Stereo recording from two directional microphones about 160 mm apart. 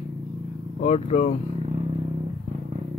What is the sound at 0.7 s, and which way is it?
Speech, 45° left (ahead or behind).